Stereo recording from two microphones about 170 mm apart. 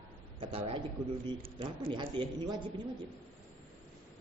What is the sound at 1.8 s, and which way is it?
Speech, 30° right (ahead or behind).